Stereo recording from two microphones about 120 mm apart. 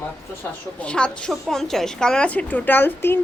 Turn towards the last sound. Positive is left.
turn(degrees=15)  # may be behind; listen again after turning